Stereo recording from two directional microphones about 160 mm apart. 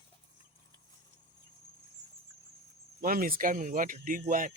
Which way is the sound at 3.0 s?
65° right (ahead or behind).